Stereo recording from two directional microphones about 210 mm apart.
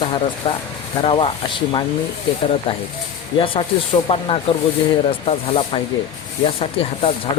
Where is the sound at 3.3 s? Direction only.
25° left (ahead or behind).